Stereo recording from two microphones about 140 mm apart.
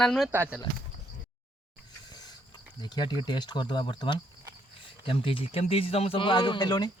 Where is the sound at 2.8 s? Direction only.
30° left (ahead or behind).